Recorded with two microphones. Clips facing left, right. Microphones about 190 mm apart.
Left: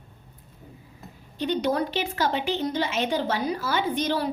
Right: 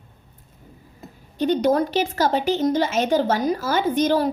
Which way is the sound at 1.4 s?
45° right (ahead or behind).